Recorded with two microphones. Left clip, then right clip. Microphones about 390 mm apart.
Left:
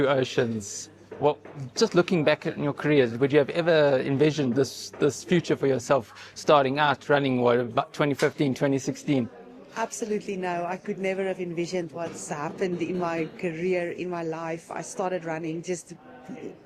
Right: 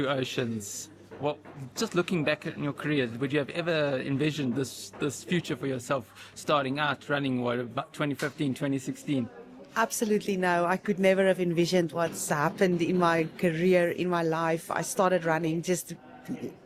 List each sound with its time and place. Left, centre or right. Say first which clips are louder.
0.0 s a man's voice: left 6 dB; centre
9.7 s speech: right 2 dB; right